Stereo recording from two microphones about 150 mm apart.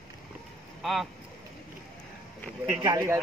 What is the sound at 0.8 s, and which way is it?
Speech, centre (ahead or behind).